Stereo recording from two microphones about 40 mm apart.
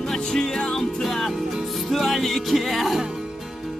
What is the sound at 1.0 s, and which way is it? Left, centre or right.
Music, centre.